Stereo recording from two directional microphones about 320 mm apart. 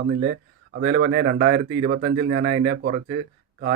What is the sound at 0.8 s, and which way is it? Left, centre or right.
Speech, right.